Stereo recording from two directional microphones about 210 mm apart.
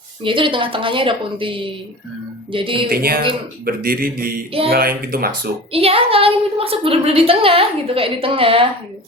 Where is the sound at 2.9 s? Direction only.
45° right (ahead or behind).